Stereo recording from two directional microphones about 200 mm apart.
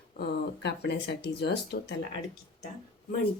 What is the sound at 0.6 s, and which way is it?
Speech, 60° left (ahead or behind).